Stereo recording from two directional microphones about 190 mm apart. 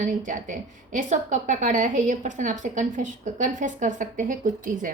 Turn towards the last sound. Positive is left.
turn(degrees=-45)  # may be behind; listen again after turning